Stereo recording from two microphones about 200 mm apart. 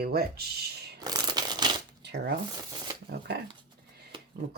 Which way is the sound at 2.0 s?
60° right (ahead or behind).